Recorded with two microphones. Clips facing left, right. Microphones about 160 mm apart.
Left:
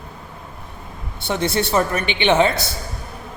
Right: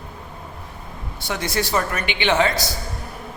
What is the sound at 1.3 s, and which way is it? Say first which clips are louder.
A woman's voice: left 4 dB; 25° left (ahead or behind).